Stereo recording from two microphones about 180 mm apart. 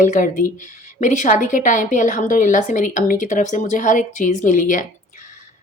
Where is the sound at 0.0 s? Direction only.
45° left (ahead or behind).